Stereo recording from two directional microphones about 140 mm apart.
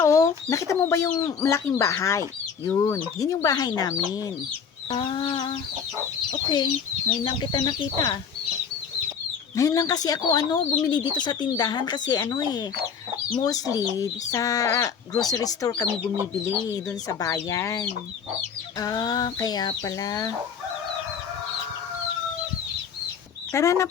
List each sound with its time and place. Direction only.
0.0 s chicken: 20° left (ahead or behind)
0.5 s speech: 20° left (ahead or behind); by 5.5 s 40° left (ahead or behind)
7.3 s speech: 30° left (ahead or behind)
9.6 s speech: 25° left (ahead or behind)
23.5 s speech: 20° left (ahead or behind)